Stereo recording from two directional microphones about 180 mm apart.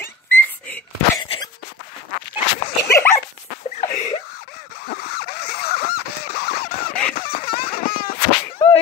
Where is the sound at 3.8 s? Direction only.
40° left (ahead or behind).